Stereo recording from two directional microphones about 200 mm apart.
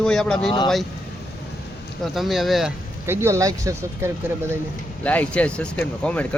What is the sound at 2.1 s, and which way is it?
Speech, centre (ahead or behind).